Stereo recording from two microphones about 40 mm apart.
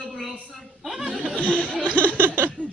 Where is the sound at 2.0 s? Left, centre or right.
Right.